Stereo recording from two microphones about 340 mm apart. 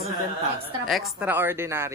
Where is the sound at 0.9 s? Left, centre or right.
Centre.